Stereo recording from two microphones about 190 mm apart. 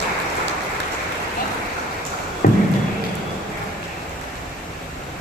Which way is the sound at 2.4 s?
50° left (ahead or behind).